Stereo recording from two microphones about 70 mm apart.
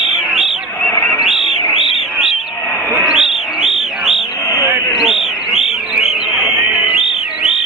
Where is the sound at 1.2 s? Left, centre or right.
Centre.